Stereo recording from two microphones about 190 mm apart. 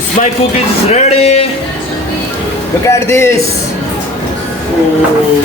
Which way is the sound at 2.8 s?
15° left (ahead or behind).